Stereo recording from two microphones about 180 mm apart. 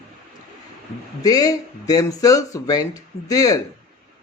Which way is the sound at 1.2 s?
20° left (ahead or behind).